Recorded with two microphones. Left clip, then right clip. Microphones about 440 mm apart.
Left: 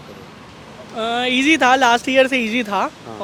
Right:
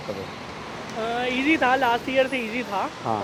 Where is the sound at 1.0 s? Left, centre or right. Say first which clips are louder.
Left 7 dB; left.